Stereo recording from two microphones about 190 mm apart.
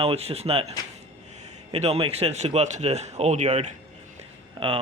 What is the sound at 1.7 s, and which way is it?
Speech, 35° right (ahead or behind).